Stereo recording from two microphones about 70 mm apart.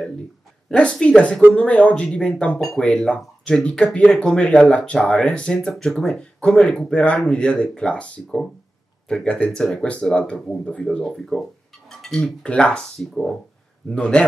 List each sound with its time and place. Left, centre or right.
0.7 s a woman's voice: centre